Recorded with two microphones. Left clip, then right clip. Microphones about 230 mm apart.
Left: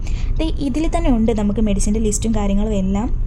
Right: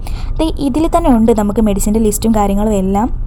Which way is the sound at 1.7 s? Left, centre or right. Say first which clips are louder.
Right 7 dB; right.